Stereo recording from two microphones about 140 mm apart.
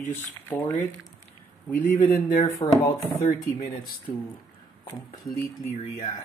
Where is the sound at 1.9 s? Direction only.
15° left (ahead or behind).